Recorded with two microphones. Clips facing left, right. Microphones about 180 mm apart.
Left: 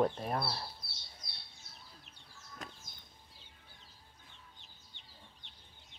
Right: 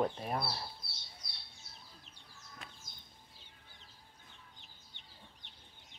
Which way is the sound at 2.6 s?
40° left (ahead or behind).